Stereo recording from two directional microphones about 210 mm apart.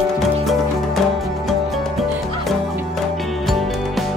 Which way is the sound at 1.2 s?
Centre (ahead or behind).